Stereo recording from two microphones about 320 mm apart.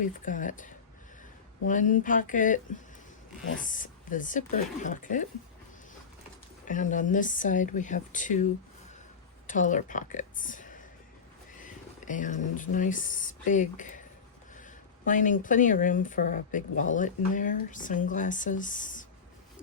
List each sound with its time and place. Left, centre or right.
0.0 s speech: left
3.6 s speech: left
6.7 s speech: left
9.5 s speech: left